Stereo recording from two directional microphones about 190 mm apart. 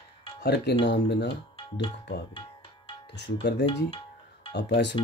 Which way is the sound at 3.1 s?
60° left (ahead or behind).